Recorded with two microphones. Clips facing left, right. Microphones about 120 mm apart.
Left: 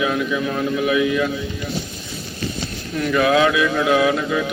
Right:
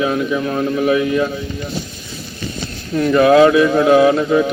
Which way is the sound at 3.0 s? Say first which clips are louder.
Right 7 dB; 30° right (ahead or behind).